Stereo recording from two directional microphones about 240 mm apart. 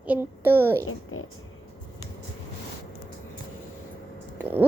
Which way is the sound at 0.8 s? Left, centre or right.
Left.